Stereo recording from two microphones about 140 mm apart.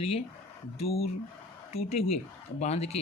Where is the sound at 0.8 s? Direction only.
45° left (ahead or behind).